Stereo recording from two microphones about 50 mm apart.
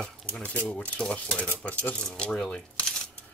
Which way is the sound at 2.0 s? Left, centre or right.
Centre.